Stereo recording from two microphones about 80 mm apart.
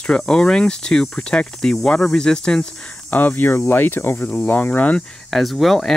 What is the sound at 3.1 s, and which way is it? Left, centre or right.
Speech, left.